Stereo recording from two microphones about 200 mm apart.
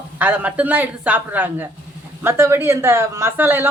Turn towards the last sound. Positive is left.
turn(degrees=-10)  # may be behind; listen again after turning